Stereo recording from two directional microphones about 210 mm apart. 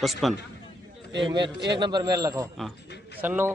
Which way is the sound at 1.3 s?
55° right (ahead or behind).